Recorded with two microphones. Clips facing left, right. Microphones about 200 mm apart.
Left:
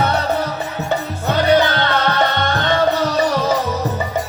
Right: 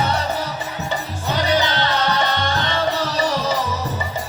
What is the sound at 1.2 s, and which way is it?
Music, 55° left (ahead or behind).